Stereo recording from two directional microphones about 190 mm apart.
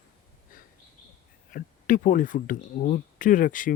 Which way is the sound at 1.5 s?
45° left (ahead or behind).